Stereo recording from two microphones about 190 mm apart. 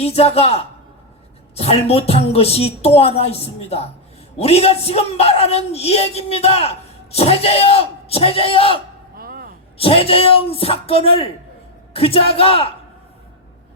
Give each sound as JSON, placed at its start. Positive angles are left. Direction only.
{"t": 0.0, "sound": "speech", "side_deg": 30}
{"t": 9.1, "sound": "a sound", "side_deg": -50}
{"t": 9.7, "sound": "a woman's voice", "side_deg": 30}